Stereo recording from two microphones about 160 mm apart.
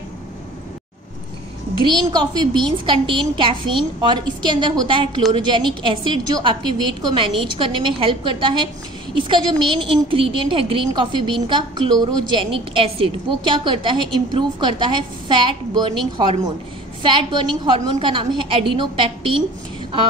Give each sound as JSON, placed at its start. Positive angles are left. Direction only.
{"t": 1.8, "sound": "a woman's voice", "side_deg": -25}
{"t": 17.0, "sound": "a woman's voice", "side_deg": -30}